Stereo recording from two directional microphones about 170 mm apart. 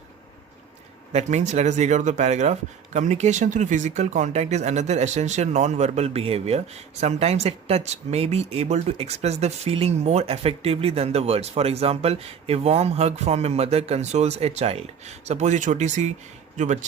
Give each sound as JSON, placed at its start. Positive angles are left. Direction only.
{"t": 1.1, "sound": "a man's voice", "side_deg": -40}